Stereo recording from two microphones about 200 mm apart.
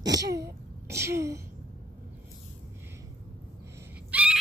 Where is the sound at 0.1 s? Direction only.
15° right (ahead or behind).